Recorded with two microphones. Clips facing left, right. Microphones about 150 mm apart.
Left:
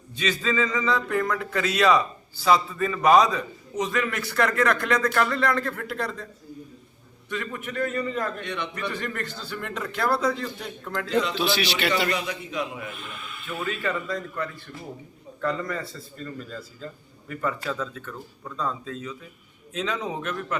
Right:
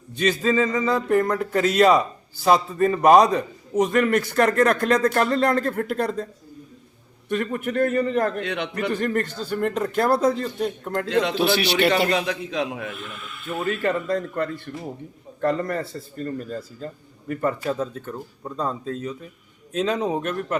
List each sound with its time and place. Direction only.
0.2 s a man's voice: 45° right (ahead or behind)
7.3 s a man's voice: 55° right (ahead or behind); by 8.7 s 90° right
8.7 s a man's voice: 45° right (ahead or behind)
11.2 s a man's voice: 65° right (ahead or behind)
12.1 s a man's voice: 85° right
12.9 s speech: centre (ahead or behind)
13.5 s a man's voice: 50° right (ahead or behind)